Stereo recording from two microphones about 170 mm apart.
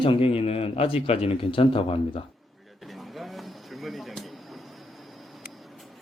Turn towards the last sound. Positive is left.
turn(degrees=0)  # may be behind; listen again after turning